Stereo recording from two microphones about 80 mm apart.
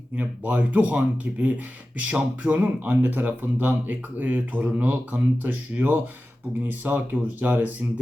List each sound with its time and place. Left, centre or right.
0.2 s speech: centre